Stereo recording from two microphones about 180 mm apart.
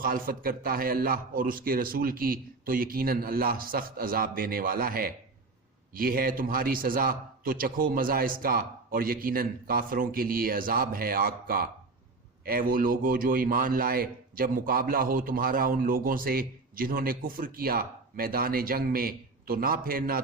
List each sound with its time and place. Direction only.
0.0 s a man's voice: 50° right (ahead or behind)